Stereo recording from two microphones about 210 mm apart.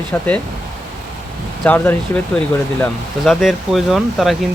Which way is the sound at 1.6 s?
10° left (ahead or behind).